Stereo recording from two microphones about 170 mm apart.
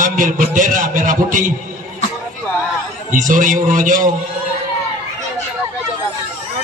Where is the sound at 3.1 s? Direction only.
50° right (ahead or behind).